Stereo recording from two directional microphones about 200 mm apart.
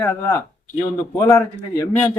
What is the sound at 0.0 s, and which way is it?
A man's voice, 10° left (ahead or behind).